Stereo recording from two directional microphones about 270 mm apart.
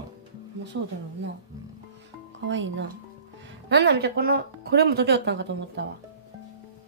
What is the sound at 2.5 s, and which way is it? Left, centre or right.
Speech, right.